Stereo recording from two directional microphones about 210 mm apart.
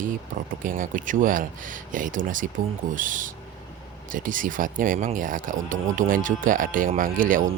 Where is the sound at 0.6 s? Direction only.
40° right (ahead or behind).